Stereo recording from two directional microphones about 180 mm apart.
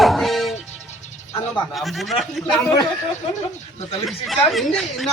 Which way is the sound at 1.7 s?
Centre (ahead or behind).